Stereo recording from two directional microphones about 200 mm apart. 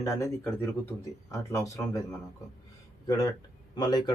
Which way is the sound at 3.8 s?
20° left (ahead or behind).